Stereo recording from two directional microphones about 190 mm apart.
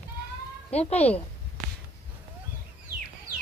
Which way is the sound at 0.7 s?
35° left (ahead or behind).